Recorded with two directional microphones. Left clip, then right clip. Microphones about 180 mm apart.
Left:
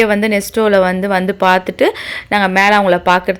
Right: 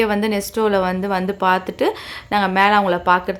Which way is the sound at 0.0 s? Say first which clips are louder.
Left 6 dB; 20° left (ahead or behind).